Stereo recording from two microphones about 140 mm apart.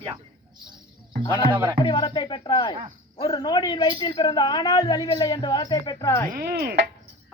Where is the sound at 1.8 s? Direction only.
30° left (ahead or behind).